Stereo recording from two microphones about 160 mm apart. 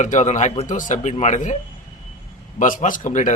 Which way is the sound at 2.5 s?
55° left (ahead or behind).